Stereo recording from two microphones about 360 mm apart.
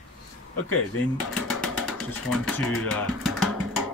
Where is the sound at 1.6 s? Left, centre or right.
Centre.